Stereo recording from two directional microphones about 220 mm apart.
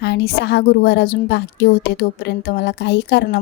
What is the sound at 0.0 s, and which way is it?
A woman's voice, 50° left (ahead or behind).